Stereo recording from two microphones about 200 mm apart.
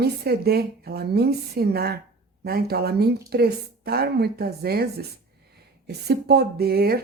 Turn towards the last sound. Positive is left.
turn(degrees=-50)  # may be behind; listen again after turning